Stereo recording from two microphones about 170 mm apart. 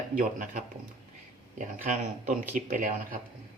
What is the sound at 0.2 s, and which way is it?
Speech, 55° right (ahead or behind).